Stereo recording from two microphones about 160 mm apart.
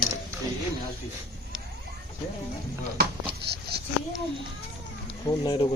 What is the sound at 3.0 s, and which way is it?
Speech, 85° right.